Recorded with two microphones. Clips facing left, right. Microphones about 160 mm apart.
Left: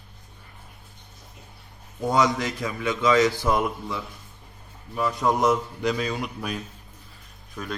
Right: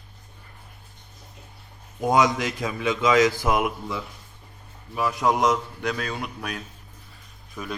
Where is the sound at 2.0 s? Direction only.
20° right (ahead or behind).